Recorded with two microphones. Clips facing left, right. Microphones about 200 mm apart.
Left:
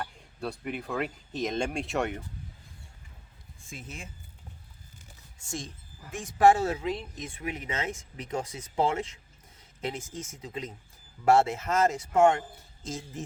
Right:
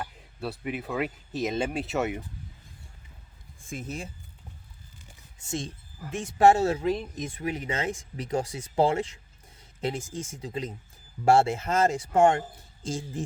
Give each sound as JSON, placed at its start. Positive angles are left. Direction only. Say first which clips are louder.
{"t": 0.0, "sound": "speech", "louder": "right 1 dB", "side_deg": -5}
{"t": 3.7, "sound": "speech", "louder": "right 8 dB", "side_deg": -45}
{"t": 5.5, "sound": "speech", "louder": "right 5 dB", "side_deg": -25}
{"t": 10.2, "sound": "speech", "louder": "right 4 dB", "side_deg": -30}